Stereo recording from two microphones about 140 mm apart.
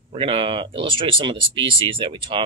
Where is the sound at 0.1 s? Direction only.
35° right (ahead or behind).